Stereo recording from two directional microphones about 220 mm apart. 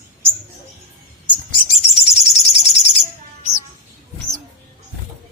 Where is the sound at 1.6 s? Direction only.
25° left (ahead or behind).